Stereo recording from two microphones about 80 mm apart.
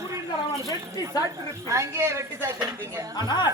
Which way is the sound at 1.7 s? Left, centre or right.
Right.